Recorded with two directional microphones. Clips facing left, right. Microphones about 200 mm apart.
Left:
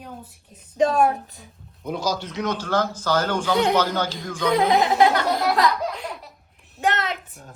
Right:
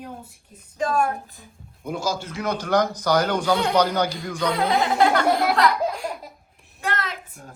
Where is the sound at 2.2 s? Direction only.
10° right (ahead or behind).